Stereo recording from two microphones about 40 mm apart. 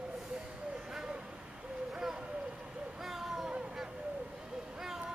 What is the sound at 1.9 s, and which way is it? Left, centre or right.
Owl, centre.